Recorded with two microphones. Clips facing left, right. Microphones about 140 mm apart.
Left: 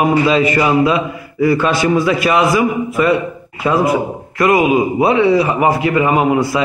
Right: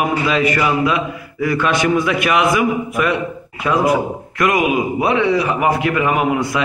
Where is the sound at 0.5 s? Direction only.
30° left (ahead or behind).